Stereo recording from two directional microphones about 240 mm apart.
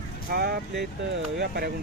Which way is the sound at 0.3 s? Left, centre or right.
Right.